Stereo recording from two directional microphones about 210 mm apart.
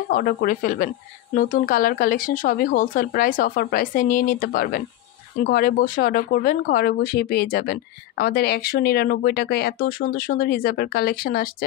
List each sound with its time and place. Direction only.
0.1 s a woman's voice: 45° left (ahead or behind)